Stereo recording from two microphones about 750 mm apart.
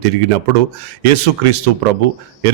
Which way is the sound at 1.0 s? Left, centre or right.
Right.